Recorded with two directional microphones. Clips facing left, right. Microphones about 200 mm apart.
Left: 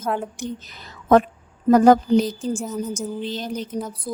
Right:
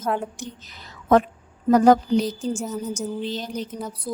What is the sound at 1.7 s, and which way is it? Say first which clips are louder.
Speech: left 2 dB; 55° left (ahead or behind).